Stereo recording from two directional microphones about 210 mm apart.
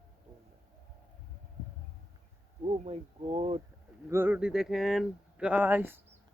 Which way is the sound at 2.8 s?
30° right (ahead or behind).